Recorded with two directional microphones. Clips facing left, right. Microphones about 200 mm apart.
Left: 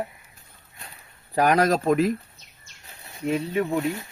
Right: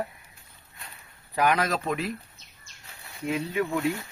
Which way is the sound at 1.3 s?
40° left (ahead or behind).